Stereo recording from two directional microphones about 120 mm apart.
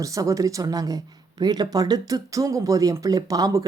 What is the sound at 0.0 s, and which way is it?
Speech, 25° right (ahead or behind).